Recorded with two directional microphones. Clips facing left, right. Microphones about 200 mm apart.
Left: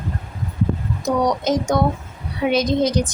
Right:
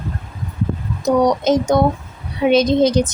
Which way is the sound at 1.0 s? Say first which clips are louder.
Right 5 dB; 25° right (ahead or behind).